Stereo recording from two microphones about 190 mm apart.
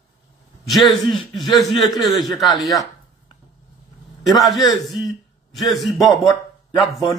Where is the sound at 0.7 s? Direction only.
Centre (ahead or behind).